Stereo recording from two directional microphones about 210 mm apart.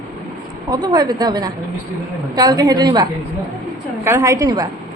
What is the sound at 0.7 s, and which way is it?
A woman's voice, 20° right (ahead or behind).